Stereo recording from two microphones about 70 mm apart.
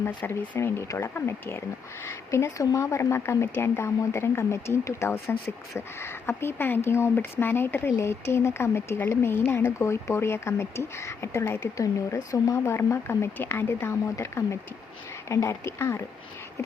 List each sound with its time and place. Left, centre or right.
0.3 s speech: left
11.8 s speech: left